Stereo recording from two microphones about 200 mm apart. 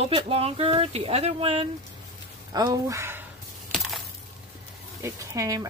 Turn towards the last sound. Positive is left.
turn(degrees=-15)  # may be behind; listen again after turning